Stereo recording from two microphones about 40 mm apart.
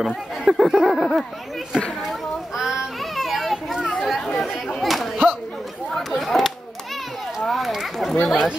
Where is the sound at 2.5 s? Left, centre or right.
Centre.